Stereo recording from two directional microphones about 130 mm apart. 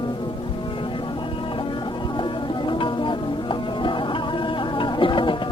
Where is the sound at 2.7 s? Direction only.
40° left (ahead or behind).